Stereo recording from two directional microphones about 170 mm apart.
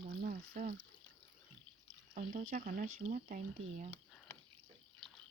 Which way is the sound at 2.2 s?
50° right (ahead or behind).